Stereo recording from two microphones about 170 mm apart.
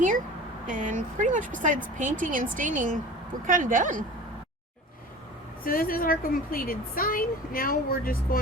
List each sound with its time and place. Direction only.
0.7 s speech: 50° right (ahead or behind)
5.6 s a woman's voice: 55° left (ahead or behind)